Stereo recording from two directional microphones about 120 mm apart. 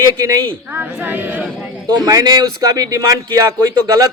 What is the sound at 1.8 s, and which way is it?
Speech, 30° right (ahead or behind).